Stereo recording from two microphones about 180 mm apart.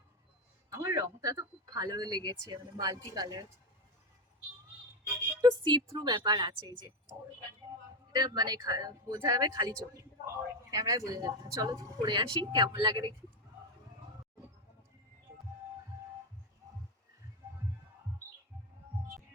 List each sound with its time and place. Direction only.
0.7 s speech: 15° right (ahead or behind)
5.0 s speech: 20° right (ahead or behind)
8.1 s speech: 20° right (ahead or behind)